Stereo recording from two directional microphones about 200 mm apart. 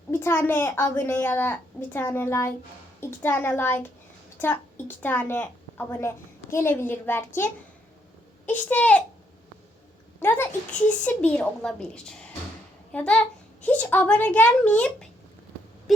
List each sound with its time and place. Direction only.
0.1 s a woman's voice: 10° left (ahead or behind)
10.2 s a woman's voice: 10° left (ahead or behind)